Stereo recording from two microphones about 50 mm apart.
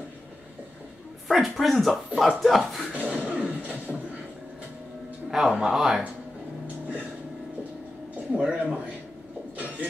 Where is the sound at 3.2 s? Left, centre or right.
Right.